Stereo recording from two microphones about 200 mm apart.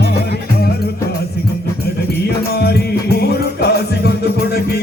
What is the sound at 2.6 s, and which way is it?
Music, 50° left (ahead or behind).